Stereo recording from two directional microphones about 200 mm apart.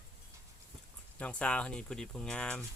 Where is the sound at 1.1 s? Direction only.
5° left (ahead or behind).